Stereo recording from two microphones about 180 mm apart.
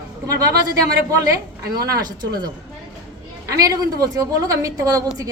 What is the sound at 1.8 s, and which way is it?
A woman's voice, 20° right (ahead or behind).